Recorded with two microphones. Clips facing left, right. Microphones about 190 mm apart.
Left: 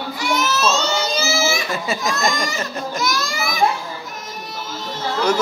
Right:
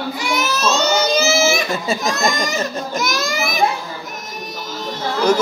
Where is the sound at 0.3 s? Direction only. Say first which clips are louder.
Even; 15° right (ahead or behind).